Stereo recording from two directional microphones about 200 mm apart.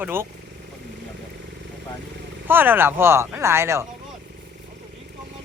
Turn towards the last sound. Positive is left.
turn(degrees=-15)  # may be behind; listen again after turning